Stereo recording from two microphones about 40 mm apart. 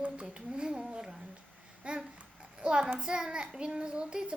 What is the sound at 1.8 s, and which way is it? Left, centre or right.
Babbling, right.